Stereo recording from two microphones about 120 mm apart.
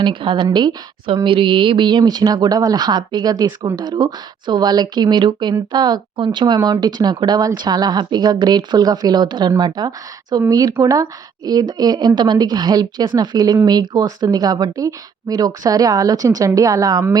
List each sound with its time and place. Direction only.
0.0 s a woman's voice: 45° right (ahead or behind)